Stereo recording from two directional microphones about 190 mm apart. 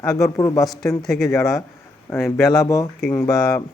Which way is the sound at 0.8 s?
Centre (ahead or behind).